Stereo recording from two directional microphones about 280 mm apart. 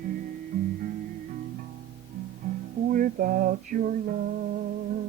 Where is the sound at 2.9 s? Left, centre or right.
Right.